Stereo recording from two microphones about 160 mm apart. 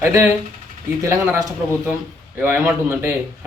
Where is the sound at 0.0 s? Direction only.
15° right (ahead or behind).